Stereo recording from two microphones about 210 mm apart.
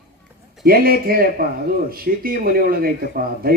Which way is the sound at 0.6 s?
45° right (ahead or behind).